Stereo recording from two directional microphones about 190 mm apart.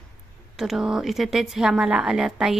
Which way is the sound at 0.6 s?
5° right (ahead or behind).